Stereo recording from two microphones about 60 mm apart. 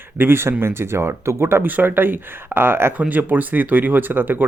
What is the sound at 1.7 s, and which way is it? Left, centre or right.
Speech, right.